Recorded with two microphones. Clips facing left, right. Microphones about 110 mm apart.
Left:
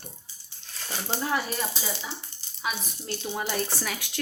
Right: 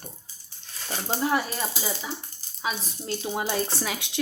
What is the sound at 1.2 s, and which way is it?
Speech, 25° right (ahead or behind).